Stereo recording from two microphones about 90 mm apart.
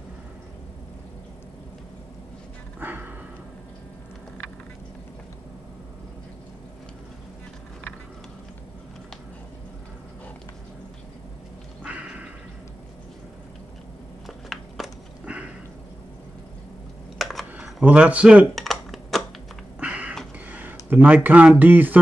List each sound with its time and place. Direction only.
2.8 s music: 20° right (ahead or behind)
11.8 s music: 15° right (ahead or behind)
14.2 s a sound: centre (ahead or behind)
15.2 s cat: 15° right (ahead or behind)
17.2 s computer keyboard: centre (ahead or behind)
17.8 s speech: 15° right (ahead or behind)
18.5 s computer keyboard: centre (ahead or behind)
19.8 s a sound: 15° right (ahead or behind)
20.9 s speech: 20° right (ahead or behind)